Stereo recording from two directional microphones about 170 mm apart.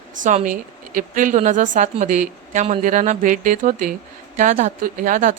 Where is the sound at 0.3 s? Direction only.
50° right (ahead or behind).